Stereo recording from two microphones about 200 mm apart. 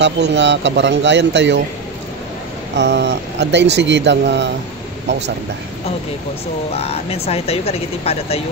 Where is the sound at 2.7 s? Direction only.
60° right (ahead or behind).